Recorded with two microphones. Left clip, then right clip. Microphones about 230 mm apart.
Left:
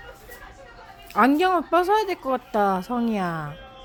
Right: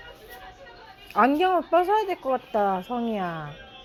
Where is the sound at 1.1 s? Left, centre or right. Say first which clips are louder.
Left 1 dB; left.